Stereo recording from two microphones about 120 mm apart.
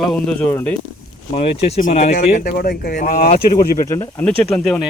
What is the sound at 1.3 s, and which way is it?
Speech, 60° left (ahead or behind).